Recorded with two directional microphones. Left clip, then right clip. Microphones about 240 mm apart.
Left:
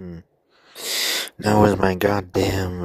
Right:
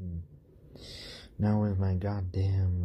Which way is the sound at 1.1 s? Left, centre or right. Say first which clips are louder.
Left 13 dB; left.